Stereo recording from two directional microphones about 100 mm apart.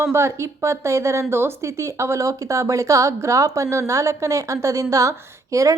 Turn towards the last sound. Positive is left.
turn(degrees=-30)  # may be behind; listen again after turning